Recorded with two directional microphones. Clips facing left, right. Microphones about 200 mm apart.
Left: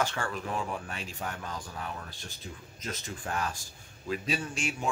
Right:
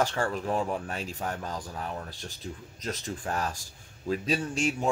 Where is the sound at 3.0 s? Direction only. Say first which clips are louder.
Right 2 dB; 40° right (ahead or behind).